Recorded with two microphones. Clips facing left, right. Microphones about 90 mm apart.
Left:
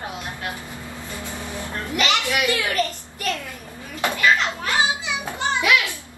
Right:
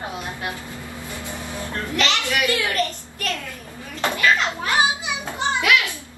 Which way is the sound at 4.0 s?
20° left (ahead or behind).